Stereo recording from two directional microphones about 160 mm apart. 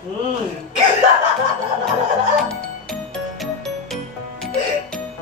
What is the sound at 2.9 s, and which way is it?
Music, centre (ahead or behind).